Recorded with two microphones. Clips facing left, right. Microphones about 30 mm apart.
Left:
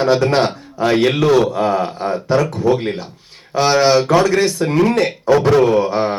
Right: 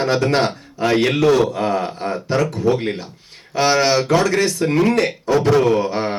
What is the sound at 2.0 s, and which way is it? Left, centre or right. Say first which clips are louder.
Speech: left 4 dB; left.